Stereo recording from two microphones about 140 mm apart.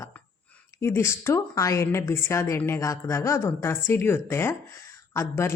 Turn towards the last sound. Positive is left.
turn(degrees=20)  # may be behind; listen again after turning